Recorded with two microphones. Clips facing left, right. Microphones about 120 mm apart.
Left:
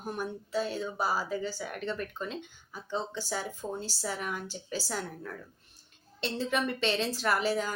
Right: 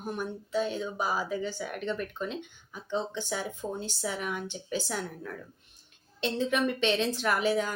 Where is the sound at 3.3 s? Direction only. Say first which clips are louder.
Right 1 dB; centre (ahead or behind).